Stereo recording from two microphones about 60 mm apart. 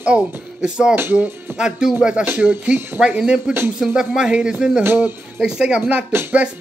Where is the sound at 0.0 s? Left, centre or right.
Centre.